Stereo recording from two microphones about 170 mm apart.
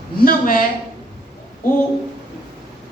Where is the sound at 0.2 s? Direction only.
55° left (ahead or behind).